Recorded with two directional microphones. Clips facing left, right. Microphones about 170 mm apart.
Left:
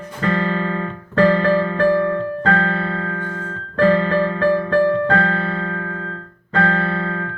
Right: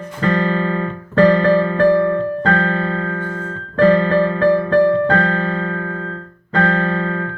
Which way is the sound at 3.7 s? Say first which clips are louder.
Right 3 dB; 30° right (ahead or behind).